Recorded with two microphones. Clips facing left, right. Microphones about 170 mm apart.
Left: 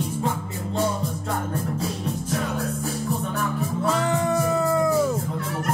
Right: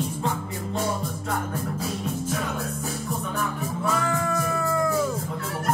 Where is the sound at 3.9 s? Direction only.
20° left (ahead or behind).